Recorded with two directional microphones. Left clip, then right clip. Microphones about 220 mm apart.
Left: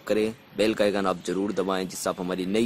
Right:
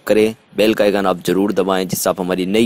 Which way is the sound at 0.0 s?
35° right (ahead or behind).